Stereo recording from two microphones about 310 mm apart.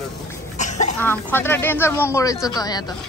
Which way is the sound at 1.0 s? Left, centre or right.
Centre.